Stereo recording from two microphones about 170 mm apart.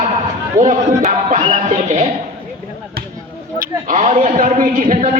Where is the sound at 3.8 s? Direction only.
40° right (ahead or behind).